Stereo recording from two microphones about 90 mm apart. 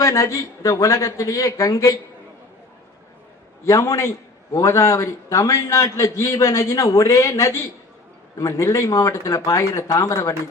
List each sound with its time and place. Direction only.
0.0 s a man's voice: 35° left (ahead or behind)
3.7 s a man's voice: 35° left (ahead or behind)